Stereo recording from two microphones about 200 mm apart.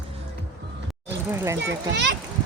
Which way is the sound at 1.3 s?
15° right (ahead or behind).